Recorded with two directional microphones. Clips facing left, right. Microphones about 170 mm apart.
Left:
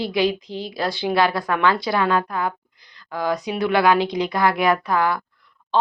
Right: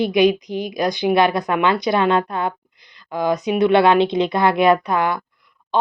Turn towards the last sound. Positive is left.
turn(degrees=-20)  # may be behind; listen again after turning